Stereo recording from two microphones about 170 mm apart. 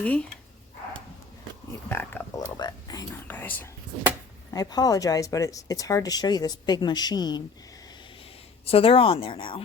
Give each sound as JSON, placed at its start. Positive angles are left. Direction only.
{"t": 0.0, "sound": "speech", "side_deg": 10}
{"t": 1.9, "sound": "speech", "side_deg": 10}
{"t": 2.6, "sound": "speech", "side_deg": 25}
{"t": 4.5, "sound": "speech", "side_deg": 20}
{"t": 8.6, "sound": "speech", "side_deg": 35}